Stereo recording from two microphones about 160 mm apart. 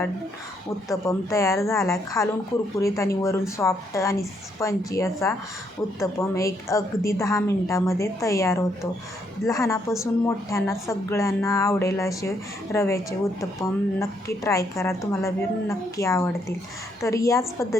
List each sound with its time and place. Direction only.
0.9 s a woman's voice: 20° left (ahead or behind)